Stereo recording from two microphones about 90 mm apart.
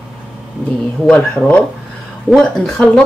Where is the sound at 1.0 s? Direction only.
10° left (ahead or behind).